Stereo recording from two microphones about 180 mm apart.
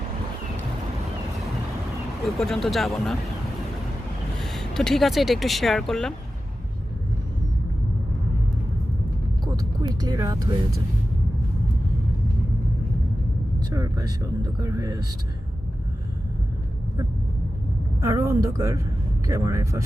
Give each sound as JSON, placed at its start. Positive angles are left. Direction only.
{"t": 2.2, "sound": "speech", "side_deg": 0}
{"t": 4.4, "sound": "speech", "side_deg": 0}
{"t": 9.4, "sound": "a sound", "side_deg": -20}
{"t": 13.7, "sound": "speech", "side_deg": -20}
{"t": 18.0, "sound": "a woman's voice", "side_deg": -15}